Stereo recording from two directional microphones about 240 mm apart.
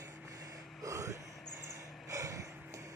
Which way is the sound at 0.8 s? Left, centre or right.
Centre.